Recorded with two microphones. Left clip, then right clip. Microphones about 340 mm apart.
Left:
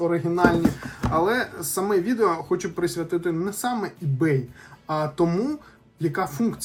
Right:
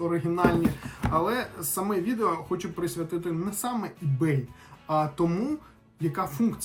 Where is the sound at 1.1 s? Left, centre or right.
Centre.